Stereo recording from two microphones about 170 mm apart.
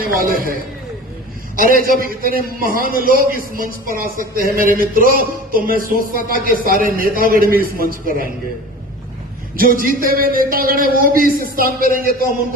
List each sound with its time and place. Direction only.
0.0 s a man's voice: 55° right (ahead or behind)
1.5 s a man's voice: 55° right (ahead or behind)
9.6 s a man's voice: 55° right (ahead or behind)